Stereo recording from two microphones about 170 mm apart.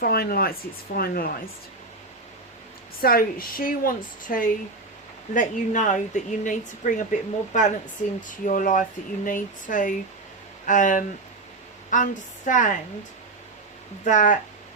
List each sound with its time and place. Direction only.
0.0 s speech: 60° left (ahead or behind)
3.0 s speech: 60° left (ahead or behind)
14.0 s speech: 50° left (ahead or behind)